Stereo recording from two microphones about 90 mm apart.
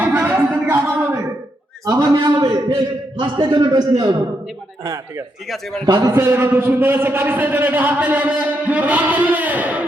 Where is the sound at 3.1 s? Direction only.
55° right (ahead or behind).